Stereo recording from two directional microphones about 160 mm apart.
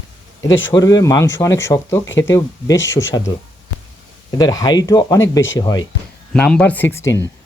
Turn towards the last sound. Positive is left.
turn(degrees=20)  # may be behind; listen again after turning